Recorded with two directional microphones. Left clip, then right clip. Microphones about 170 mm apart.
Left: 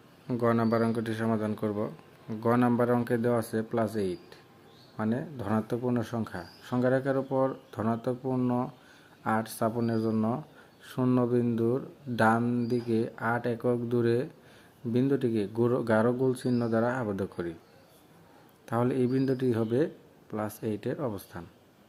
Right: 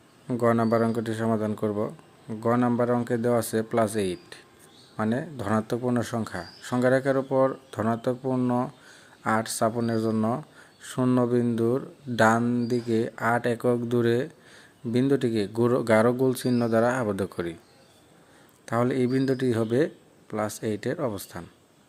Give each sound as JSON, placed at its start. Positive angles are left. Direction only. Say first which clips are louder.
{"t": 0.3, "sound": "a man's voice", "louder": "right 4 dB", "side_deg": -20}
{"t": 18.6, "sound": "speech", "louder": "right 3 dB", "side_deg": -10}